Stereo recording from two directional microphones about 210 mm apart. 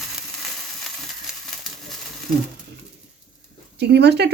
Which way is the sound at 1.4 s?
Centre (ahead or behind).